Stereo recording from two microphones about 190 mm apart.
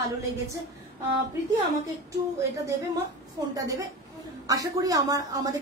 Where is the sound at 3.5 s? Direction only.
20° right (ahead or behind).